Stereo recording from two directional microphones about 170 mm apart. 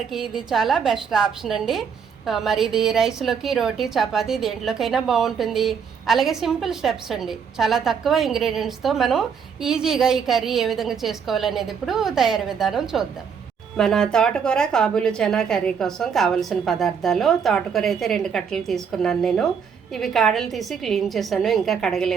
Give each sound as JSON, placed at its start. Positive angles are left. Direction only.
{"t": 0.1, "sound": "a woman's voice", "side_deg": -5}